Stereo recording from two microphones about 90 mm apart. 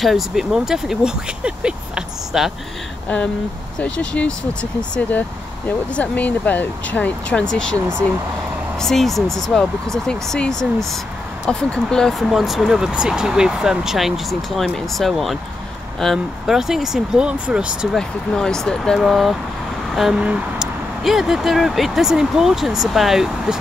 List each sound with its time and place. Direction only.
0.0 s speech: 5° right (ahead or behind)
3.8 s speech: 10° left (ahead or behind)
5.9 s speech: 15° left (ahead or behind)
8.7 s speech: 5° left (ahead or behind); by 17.7 s 10° right (ahead or behind)
17.9 s speech: 5° left (ahead or behind)